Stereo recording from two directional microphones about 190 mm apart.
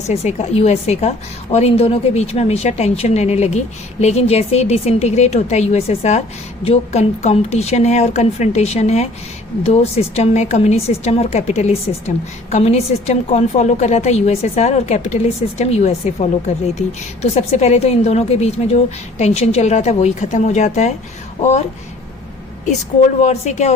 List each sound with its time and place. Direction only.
0.1 s a woman's voice: 35° left (ahead or behind)
17.3 s a woman's voice: 35° left (ahead or behind)
23.2 s a woman's voice: 35° left (ahead or behind)